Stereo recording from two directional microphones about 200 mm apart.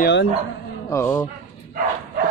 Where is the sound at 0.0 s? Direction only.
55° left (ahead or behind).